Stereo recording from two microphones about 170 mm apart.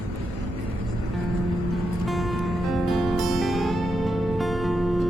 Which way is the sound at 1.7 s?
Centre (ahead or behind).